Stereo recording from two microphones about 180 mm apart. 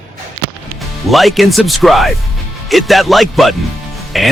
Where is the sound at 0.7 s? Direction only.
Centre (ahead or behind).